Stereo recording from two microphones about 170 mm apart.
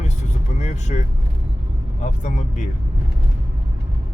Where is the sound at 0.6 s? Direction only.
45° left (ahead or behind).